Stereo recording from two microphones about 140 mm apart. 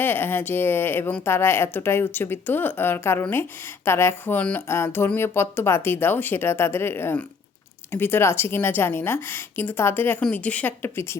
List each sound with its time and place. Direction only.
0.0 s speech: 15° left (ahead or behind)